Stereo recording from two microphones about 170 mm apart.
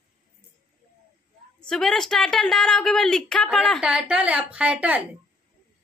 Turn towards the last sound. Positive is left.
turn(degrees=-5)  # may be behind; listen again after turning